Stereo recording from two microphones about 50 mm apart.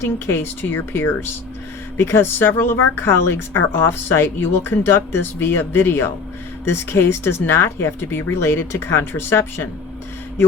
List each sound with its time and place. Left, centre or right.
0.0 s speech: left